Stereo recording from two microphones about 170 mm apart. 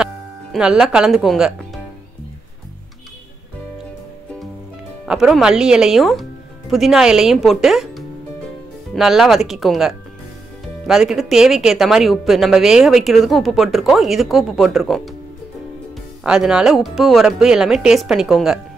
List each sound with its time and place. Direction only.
0.0 s speech: 5° right (ahead or behind)
5.0 s speech: centre (ahead or behind)
16.3 s speech: 5° right (ahead or behind)